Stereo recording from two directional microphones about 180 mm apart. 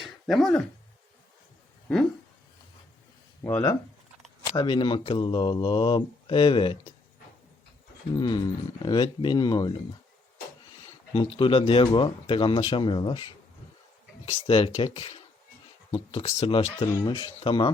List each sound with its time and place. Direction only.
0.0 s a sound: centre (ahead or behind)
3.4 s speech: 15° left (ahead or behind)
4.5 s speech: 25° left (ahead or behind)
8.1 s speech: 25° left (ahead or behind)
11.1 s speech: 30° left (ahead or behind)
14.3 s speech: 30° left (ahead or behind)